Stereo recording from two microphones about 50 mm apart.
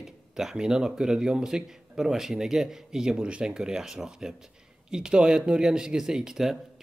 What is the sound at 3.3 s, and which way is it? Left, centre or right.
Speech, right.